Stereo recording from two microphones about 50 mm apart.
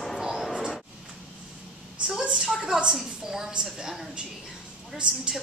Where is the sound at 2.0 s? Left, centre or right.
Centre.